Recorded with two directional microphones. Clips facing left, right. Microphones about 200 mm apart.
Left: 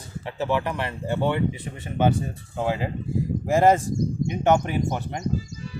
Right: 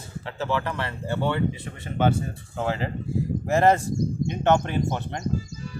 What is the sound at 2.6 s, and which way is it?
Speech, 15° left (ahead or behind).